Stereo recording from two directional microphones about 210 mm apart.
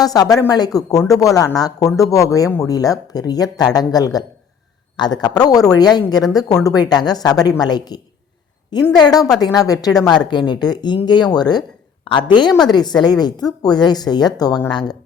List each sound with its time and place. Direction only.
0.0 s speech: 15° left (ahead or behind)